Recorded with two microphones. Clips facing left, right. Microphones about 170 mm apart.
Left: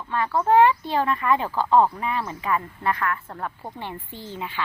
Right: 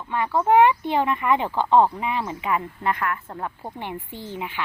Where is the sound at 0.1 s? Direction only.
15° right (ahead or behind).